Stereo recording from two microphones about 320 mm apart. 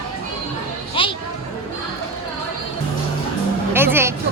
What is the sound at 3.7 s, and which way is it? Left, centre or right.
Music, centre.